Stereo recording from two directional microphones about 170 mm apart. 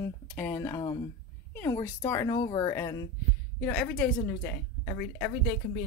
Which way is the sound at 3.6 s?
5° left (ahead or behind).